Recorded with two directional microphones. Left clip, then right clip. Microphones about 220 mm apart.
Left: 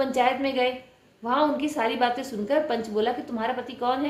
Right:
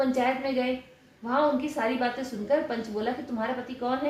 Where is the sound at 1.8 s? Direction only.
40° left (ahead or behind).